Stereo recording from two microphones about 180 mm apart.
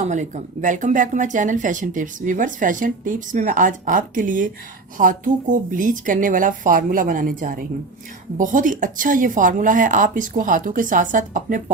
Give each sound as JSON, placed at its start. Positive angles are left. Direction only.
{"t": 0.0, "sound": "speech", "side_deg": -40}